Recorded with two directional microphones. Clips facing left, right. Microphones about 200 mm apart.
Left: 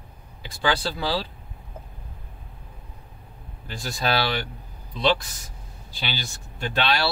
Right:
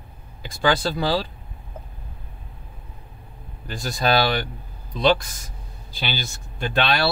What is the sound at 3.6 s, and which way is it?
Speech, 50° right (ahead or behind).